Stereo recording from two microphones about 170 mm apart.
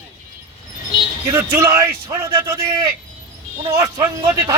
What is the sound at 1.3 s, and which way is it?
A man's voice, 15° right (ahead or behind).